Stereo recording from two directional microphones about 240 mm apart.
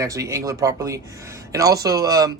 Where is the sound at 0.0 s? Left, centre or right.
Centre.